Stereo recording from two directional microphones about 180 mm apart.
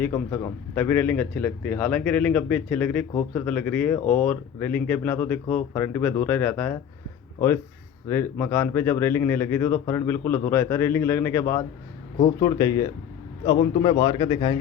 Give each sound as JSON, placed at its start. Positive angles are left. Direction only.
{"t": 0.0, "sound": "speech", "side_deg": 15}
{"t": 8.0, "sound": "a man's voice", "side_deg": 15}